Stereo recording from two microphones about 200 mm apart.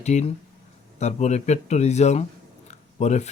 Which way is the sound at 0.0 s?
35° left (ahead or behind).